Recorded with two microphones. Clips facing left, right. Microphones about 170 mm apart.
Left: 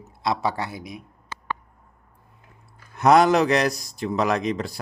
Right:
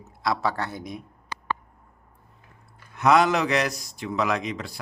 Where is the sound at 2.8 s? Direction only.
40° left (ahead or behind).